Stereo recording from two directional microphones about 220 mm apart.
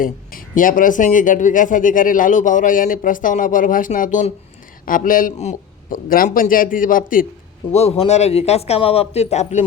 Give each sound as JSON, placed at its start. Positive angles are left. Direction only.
{"t": 0.0, "sound": "speech", "side_deg": 40}
{"t": 7.7, "sound": "speech", "side_deg": 30}